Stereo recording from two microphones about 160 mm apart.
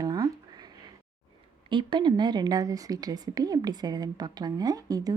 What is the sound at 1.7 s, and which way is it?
A woman's voice, 30° right (ahead or behind).